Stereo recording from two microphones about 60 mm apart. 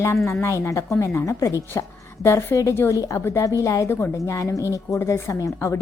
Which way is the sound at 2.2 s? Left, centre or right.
Left.